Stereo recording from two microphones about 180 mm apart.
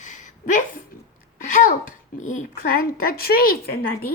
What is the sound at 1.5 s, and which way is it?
Speech, 45° left (ahead or behind).